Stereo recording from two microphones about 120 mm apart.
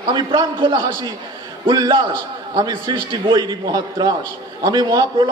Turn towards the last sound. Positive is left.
turn(degrees=-35)  # may be behind; listen again after turning